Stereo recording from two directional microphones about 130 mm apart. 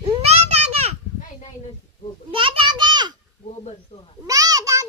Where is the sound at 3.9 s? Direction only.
50° left (ahead or behind).